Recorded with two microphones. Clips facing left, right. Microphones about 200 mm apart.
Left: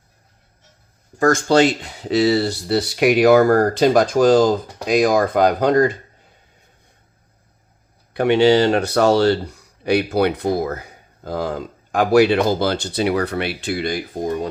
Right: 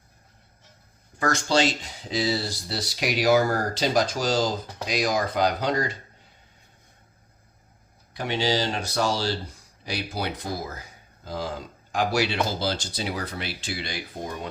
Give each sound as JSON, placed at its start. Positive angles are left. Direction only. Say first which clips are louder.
{"t": 1.2, "sound": "speech", "louder": "left 9 dB", "side_deg": 50}
{"t": 8.1, "sound": "speech", "louder": "left 12 dB", "side_deg": 65}